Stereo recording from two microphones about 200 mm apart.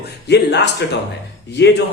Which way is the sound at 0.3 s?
60° left (ahead or behind).